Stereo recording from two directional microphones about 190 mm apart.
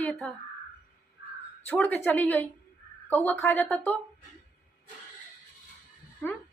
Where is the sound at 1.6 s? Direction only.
10° left (ahead or behind).